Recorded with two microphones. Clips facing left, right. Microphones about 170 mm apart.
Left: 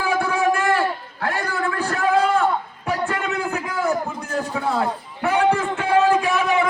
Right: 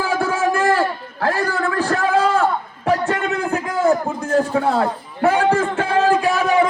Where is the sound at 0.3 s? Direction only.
35° right (ahead or behind).